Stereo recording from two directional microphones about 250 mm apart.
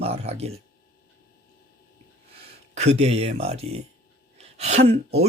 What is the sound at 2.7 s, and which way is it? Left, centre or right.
Speech, right.